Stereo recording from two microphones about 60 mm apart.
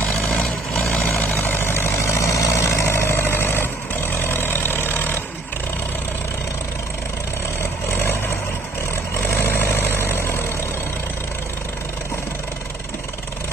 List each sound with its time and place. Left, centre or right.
0.3 s vehicle: centre
1.4 s vehicle: left
7.9 s vehicle: left
9.3 s vehicle: left